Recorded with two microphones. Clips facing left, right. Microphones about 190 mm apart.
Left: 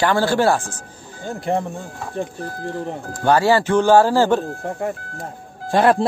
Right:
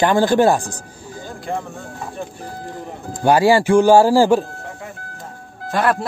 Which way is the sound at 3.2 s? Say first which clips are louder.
Right 2 dB; 10° right (ahead or behind).